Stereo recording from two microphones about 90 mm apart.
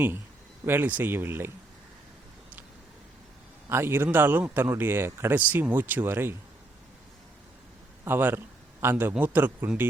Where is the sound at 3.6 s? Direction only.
25° right (ahead or behind).